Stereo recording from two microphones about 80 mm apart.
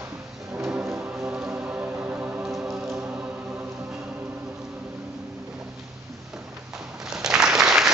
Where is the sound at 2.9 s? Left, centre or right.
Right.